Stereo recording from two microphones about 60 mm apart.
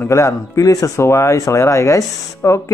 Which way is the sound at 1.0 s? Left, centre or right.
Left.